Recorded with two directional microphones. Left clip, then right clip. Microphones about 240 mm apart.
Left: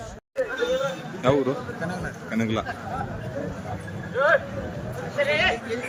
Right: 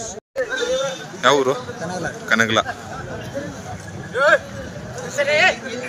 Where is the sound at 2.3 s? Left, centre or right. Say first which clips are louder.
Right 10 dB; centre.